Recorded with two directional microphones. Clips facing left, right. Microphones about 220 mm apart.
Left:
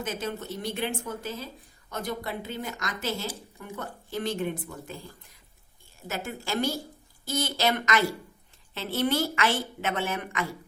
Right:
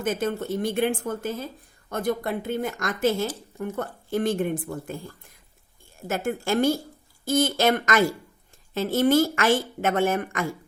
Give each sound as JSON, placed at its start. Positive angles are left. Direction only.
{"t": 0.0, "sound": "a woman's voice", "side_deg": -50}
{"t": 6.1, "sound": "a woman's voice", "side_deg": -50}